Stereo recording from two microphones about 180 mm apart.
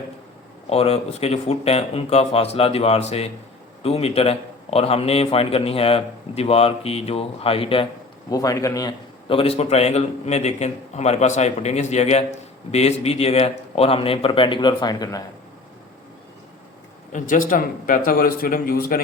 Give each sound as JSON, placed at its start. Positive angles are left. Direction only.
{"t": 0.7, "sound": "a man's voice", "side_deg": 35}
{"t": 8.3, "sound": "a man's voice", "side_deg": 20}
{"t": 9.3, "sound": "a man's voice", "side_deg": 30}
{"t": 17.1, "sound": "a man's voice", "side_deg": 45}